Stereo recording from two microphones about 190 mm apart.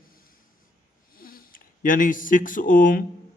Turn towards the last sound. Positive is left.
turn(degrees=45)  # may be behind; listen again after turning